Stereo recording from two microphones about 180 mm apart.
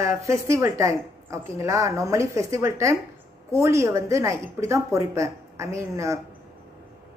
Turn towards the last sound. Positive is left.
turn(degrees=-15)  # may be behind; listen again after turning